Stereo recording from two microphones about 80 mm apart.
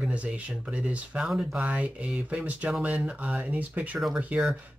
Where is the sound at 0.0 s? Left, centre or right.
Centre.